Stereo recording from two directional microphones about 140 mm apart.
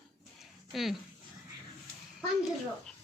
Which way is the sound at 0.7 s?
Centre (ahead or behind).